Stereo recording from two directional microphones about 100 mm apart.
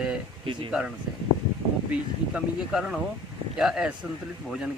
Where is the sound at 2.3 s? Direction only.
10° right (ahead or behind).